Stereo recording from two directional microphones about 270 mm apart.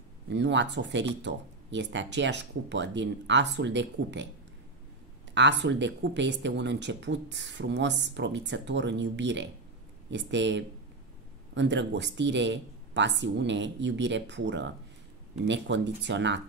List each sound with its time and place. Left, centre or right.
0.3 s speech: right
5.3 s speech: right